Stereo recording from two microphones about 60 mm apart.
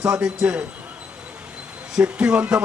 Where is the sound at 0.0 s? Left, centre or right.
Centre.